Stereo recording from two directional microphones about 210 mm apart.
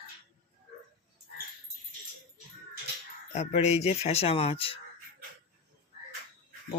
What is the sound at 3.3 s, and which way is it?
Speech, 35° left (ahead or behind).